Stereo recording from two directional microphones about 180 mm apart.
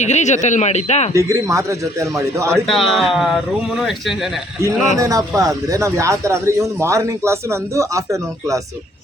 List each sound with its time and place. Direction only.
0.0 s speech: 40° left (ahead or behind)
1.1 s speech: 15° right (ahead or behind)
2.5 s speech: centre (ahead or behind)
4.9 s speech: 20° right (ahead or behind)